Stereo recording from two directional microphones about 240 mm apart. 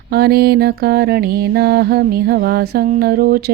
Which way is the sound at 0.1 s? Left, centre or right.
Right.